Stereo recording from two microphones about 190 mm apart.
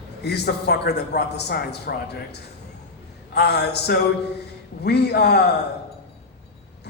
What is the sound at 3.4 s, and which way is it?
A man's voice, 60° left (ahead or behind).